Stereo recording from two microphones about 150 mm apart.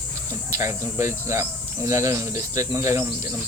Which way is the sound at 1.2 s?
20° right (ahead or behind).